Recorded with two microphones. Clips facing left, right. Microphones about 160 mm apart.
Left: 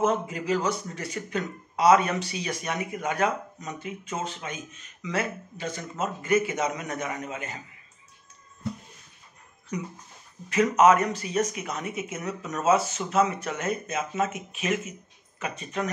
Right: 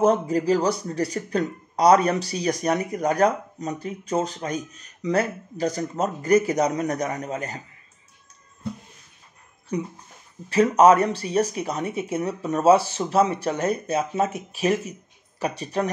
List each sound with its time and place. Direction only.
0.0 s speech: 35° right (ahead or behind)
9.7 s speech: 30° right (ahead or behind)